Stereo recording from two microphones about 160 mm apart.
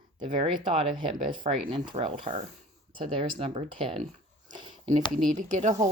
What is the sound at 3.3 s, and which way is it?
Speech, 40° right (ahead or behind).